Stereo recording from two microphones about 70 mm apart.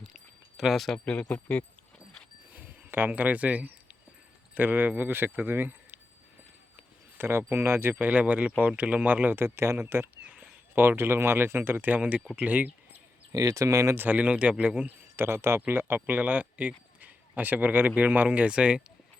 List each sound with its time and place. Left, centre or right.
0.1 s a sound: centre
1.0 s speech: centre
2.5 s a sound: right
3.1 s speech: right
7.2 s speech: right
9.4 s speech: right
10.2 s a sound: centre
10.8 s speech: right
13.3 s speech: right
13.9 s speech: right
15.1 s speech: right; by 18.8 s centre